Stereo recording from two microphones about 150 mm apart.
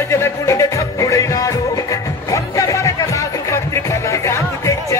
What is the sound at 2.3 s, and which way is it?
Music, 20° left (ahead or behind).